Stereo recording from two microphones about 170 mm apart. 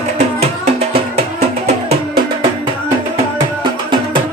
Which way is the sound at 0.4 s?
40° right (ahead or behind).